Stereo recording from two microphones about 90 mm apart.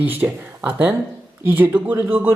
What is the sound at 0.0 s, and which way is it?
Speech, 15° right (ahead or behind).